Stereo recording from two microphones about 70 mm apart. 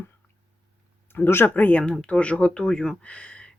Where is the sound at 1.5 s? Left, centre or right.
Left.